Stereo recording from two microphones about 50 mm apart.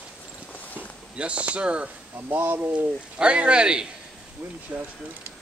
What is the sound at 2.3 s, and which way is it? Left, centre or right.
Speech, right.